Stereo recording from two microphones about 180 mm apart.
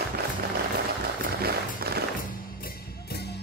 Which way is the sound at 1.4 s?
60° right (ahead or behind).